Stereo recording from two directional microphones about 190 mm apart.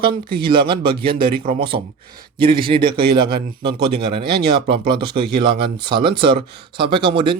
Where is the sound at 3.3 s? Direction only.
55° right (ahead or behind).